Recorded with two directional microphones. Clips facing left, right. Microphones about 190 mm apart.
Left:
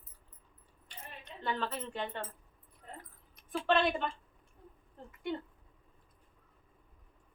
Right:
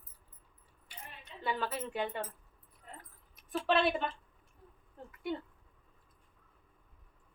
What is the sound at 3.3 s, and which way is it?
A woman's voice, 5° right (ahead or behind).